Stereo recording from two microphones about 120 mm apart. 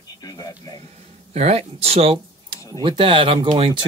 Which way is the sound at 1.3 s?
60° right (ahead or behind).